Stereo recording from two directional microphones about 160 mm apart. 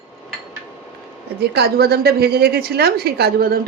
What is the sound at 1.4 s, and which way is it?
A woman's voice, 80° right.